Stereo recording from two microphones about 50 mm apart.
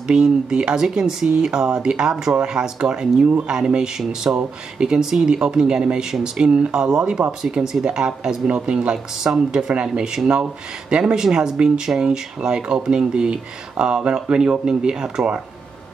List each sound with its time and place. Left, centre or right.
0.0 s speech: centre